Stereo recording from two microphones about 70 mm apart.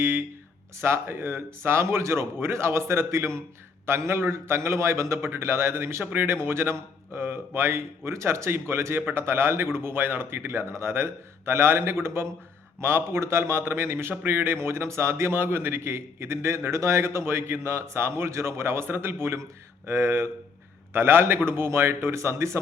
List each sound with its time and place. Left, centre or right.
0.0 s a man's voice: right